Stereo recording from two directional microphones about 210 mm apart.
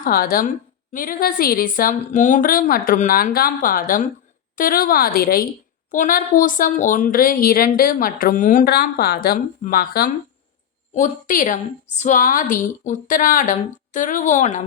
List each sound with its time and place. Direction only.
0.0 s a woman's voice: 45° left (ahead or behind)